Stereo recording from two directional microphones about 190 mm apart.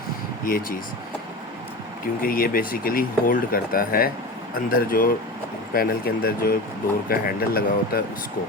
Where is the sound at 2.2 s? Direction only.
50° left (ahead or behind).